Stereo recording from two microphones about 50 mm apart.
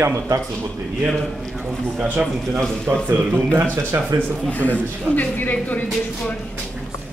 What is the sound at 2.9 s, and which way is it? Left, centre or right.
Speech, centre.